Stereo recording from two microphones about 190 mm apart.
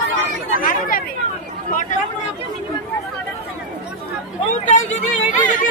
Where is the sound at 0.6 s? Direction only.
50° left (ahead or behind).